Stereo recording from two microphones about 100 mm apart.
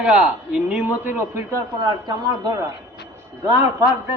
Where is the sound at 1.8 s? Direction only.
45° right (ahead or behind).